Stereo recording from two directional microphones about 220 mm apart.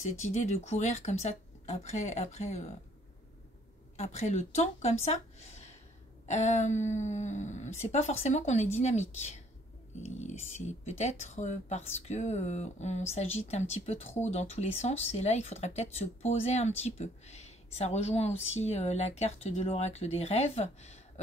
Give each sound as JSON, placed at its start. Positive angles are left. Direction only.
{"t": 0.0, "sound": "speech", "side_deg": 30}
{"t": 3.9, "sound": "speech", "side_deg": 30}